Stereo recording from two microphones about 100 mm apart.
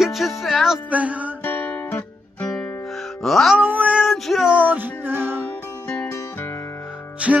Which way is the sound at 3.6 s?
15° right (ahead or behind).